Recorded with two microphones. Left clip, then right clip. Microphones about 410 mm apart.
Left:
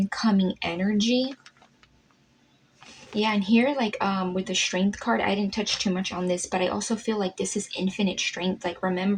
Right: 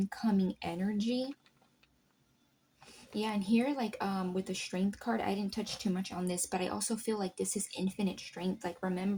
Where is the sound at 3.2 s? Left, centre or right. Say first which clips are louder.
Left 10 dB; right.